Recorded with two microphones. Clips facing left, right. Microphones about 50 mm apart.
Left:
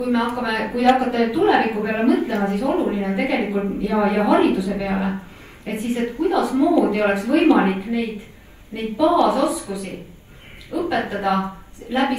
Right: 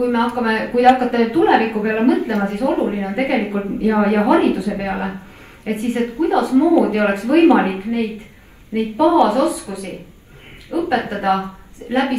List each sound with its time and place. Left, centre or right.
0.0 s a woman's voice: right